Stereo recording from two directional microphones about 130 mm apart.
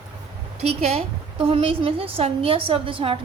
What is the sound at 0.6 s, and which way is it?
A woman's voice, 50° right (ahead or behind).